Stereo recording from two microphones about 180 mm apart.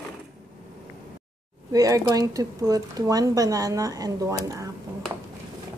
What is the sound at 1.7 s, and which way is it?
Speech, 20° right (ahead or behind).